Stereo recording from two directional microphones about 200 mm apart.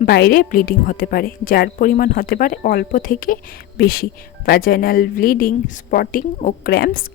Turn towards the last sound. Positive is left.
turn(degrees=50)  # may be behind; listen again after turning